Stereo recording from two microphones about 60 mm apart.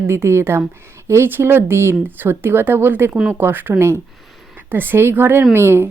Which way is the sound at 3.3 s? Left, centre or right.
Right.